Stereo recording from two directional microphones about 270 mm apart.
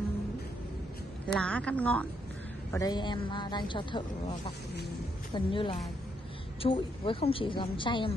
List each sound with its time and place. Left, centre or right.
1.2 s a woman's voice: centre